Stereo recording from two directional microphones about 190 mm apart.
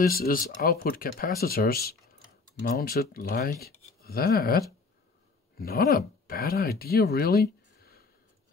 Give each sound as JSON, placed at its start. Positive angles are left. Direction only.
{"t": 0.1, "sound": "speech", "side_deg": 50}